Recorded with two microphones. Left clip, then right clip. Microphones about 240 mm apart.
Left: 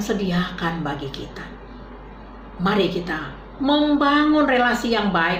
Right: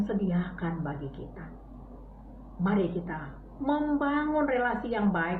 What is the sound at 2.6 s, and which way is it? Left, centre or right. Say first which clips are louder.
A woman's voice: left 9 dB; centre.